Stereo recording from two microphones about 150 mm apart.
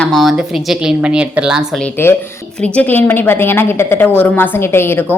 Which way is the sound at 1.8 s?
15° left (ahead or behind).